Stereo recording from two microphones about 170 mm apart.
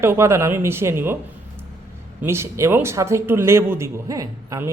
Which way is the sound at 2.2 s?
15° right (ahead or behind).